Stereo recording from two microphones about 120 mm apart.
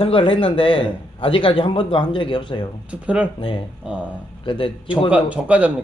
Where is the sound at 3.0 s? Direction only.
10° right (ahead or behind).